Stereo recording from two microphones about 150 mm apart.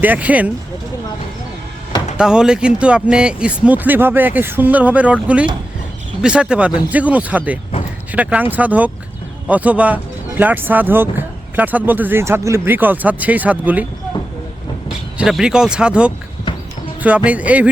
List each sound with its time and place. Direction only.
0.0 s speech: 10° right (ahead or behind)
2.1 s speech: 5° right (ahead or behind)
14.8 s speech: 5° right (ahead or behind)
16.5 s a sound: 30° left (ahead or behind)
17.0 s speech: 10° right (ahead or behind)